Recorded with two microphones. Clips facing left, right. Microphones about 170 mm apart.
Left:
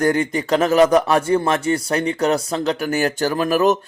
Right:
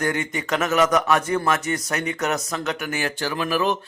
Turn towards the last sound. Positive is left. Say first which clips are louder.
# left 6 dB
turn(degrees=45)  # may be behind; listen again after turning